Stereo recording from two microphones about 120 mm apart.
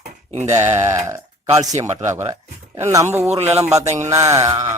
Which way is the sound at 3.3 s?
60° right (ahead or behind).